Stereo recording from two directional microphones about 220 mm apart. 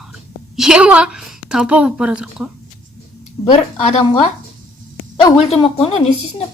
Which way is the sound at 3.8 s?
25° left (ahead or behind).